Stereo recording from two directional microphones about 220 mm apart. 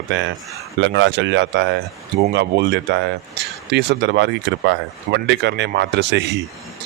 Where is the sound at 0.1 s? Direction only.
55° right (ahead or behind).